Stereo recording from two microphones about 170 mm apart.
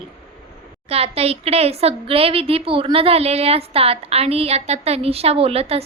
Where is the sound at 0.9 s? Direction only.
35° right (ahead or behind).